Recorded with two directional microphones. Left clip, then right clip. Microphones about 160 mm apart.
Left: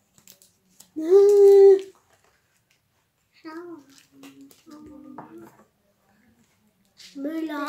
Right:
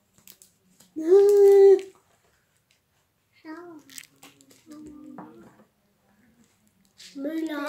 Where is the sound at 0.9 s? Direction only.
Centre (ahead or behind).